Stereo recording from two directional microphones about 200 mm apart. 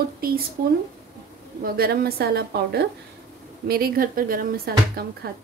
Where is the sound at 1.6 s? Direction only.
50° right (ahead or behind).